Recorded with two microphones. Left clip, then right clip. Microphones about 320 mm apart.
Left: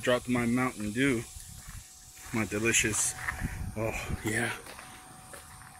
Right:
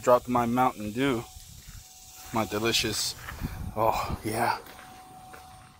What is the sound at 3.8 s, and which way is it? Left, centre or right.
Speech, right.